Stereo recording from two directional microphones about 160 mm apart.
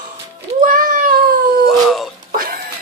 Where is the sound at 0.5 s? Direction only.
60° right (ahead or behind).